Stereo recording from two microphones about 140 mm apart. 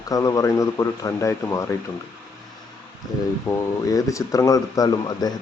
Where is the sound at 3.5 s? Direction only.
25° left (ahead or behind).